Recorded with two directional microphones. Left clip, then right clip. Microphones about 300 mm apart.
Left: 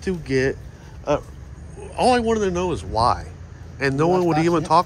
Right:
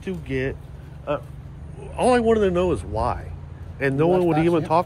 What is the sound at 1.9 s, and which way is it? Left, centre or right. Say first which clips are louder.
Speech: even; centre.